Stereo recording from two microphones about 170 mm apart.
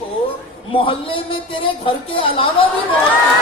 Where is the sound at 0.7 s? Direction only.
30° left (ahead or behind).